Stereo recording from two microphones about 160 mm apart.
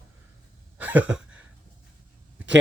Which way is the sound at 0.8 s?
10° right (ahead or behind).